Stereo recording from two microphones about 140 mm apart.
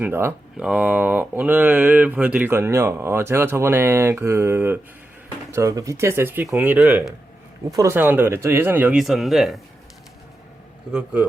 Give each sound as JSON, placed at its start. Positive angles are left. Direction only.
{"t": 0.0, "sound": "speech", "side_deg": -15}
{"t": 7.7, "sound": "speech", "side_deg": -20}
{"t": 10.9, "sound": "speech", "side_deg": -10}